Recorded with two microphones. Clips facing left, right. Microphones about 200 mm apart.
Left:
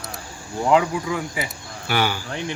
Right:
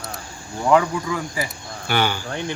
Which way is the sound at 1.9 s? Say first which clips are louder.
Right 1 dB; 5° left (ahead or behind).